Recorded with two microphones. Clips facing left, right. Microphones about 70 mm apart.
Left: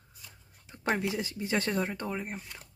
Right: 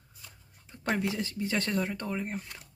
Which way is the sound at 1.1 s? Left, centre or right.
Centre.